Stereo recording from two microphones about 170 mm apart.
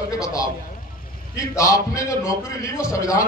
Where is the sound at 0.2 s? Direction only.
20° left (ahead or behind).